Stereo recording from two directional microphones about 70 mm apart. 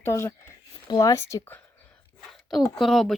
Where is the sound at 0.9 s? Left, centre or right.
Left.